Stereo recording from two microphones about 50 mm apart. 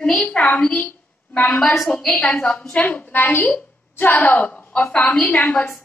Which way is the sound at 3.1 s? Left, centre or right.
Left.